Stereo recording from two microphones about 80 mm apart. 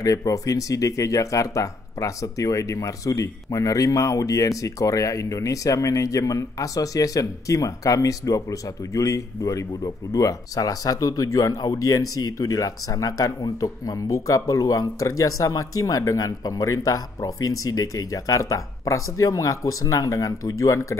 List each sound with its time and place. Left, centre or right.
0.0 s speech: left